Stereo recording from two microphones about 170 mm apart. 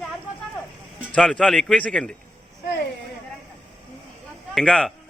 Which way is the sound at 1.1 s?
5° left (ahead or behind).